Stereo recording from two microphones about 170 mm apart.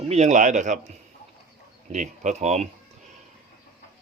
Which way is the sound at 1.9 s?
45° right (ahead or behind).